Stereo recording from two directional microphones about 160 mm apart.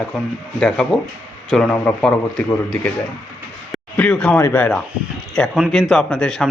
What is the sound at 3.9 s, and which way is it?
Speech, 5° left (ahead or behind).